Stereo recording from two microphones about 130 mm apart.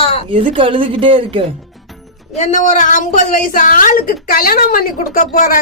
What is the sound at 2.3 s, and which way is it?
A woman's voice, 70° left (ahead or behind).